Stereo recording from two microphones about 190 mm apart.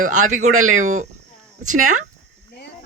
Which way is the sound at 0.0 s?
40° right (ahead or behind).